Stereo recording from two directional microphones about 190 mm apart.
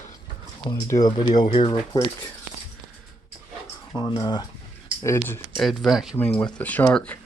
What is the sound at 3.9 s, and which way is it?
Speech, 20° left (ahead or behind).